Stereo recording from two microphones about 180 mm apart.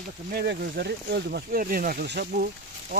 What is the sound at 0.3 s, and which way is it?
Speech, 60° right (ahead or behind).